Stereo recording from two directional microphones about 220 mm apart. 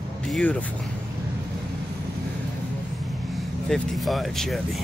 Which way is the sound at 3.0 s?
Centre (ahead or behind).